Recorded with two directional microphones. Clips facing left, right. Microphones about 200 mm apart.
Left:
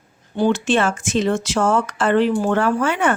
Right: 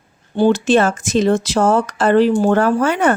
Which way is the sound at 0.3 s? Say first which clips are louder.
Right 4 dB; 35° right (ahead or behind).